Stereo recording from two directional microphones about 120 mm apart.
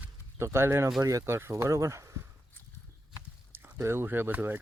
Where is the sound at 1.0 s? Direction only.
25° right (ahead or behind).